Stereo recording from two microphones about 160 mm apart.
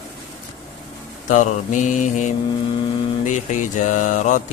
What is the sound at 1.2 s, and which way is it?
Speech, 50° left (ahead or behind).